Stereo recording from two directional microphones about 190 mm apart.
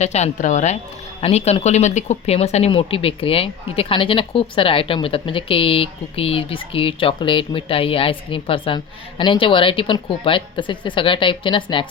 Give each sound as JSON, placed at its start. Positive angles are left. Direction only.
{"t": 0.0, "sound": "speech", "side_deg": 35}